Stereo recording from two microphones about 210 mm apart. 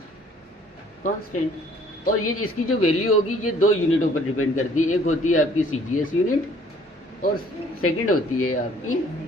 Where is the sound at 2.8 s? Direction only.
90° left.